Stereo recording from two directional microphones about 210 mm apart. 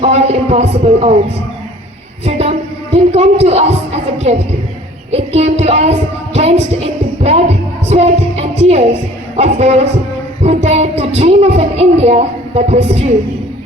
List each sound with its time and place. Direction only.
0.0 s speech: 30° right (ahead or behind)
2.2 s speech: 30° right (ahead or behind)
10.4 s a sound: 30° right (ahead or behind)